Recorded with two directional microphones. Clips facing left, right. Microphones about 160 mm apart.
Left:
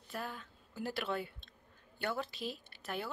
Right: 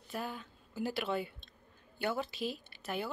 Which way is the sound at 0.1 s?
5° right (ahead or behind).